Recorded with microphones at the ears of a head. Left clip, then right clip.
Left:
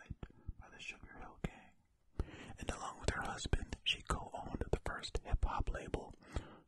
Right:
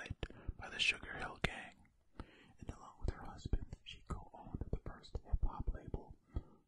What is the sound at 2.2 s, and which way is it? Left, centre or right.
Whispering, left.